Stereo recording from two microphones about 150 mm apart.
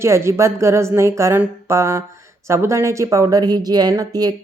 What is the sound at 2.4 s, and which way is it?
Speech, 20° right (ahead or behind).